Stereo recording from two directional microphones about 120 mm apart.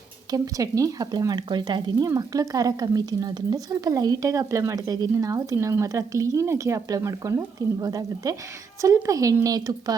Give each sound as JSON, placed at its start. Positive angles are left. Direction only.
{"t": 0.3, "sound": "speech", "side_deg": -30}